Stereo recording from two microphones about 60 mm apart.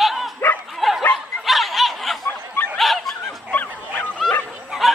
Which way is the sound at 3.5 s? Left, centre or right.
Left.